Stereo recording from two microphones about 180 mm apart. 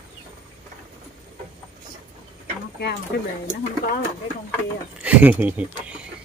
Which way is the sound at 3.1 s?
65° left (ahead or behind).